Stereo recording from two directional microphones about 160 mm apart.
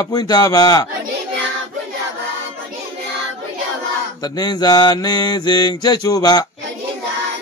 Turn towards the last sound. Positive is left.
turn(degrees=25)  # may be behind; listen again after turning